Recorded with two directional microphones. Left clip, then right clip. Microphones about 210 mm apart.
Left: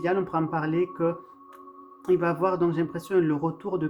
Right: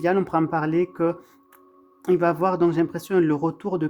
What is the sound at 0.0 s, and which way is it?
Speech, 45° right (ahead or behind).